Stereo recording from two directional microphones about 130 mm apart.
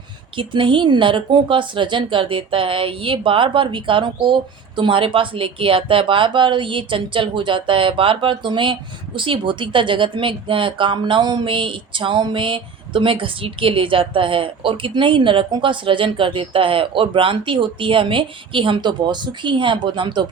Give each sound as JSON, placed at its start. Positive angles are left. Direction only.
{"t": 0.3, "sound": "speech", "side_deg": -40}